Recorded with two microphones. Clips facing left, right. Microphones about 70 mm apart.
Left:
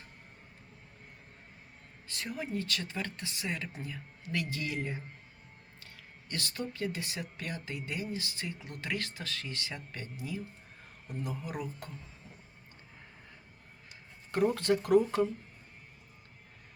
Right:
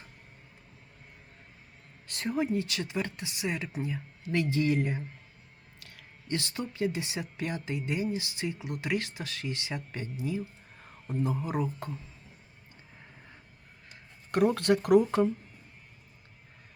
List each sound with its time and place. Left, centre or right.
2.2 s speech: right
4.7 s speech: right
5.8 s a sound: right
6.2 s speech: right
14.3 s speech: right